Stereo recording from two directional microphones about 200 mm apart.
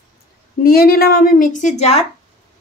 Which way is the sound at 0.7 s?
50° left (ahead or behind).